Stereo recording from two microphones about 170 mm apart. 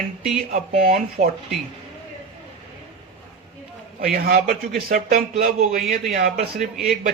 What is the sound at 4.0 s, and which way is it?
A man's voice, 60° right (ahead or behind).